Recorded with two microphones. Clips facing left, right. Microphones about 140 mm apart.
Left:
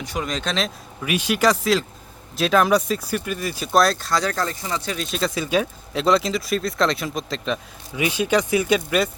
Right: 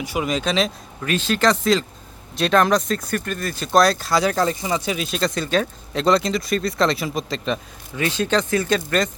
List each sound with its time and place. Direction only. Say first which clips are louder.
0.0 s speech: right 4 dB; 5° right (ahead or behind)
1.0 s speech: even; 10° left (ahead or behind); by 5.0 s 10° right (ahead or behind)
5.0 s speech: right 1 dB; centre (ahead or behind)
7.9 s speech: even; 10° left (ahead or behind)